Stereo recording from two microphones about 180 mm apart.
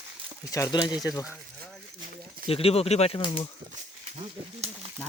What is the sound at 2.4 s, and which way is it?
Speech, 30° left (ahead or behind).